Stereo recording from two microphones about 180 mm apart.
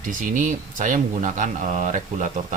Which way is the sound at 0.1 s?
45° right (ahead or behind).